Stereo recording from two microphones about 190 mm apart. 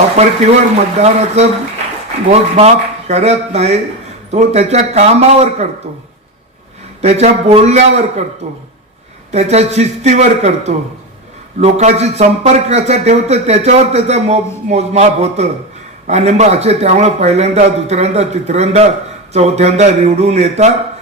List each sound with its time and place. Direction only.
0.2 s speech: 35° right (ahead or behind)
7.0 s speech: 35° right (ahead or behind)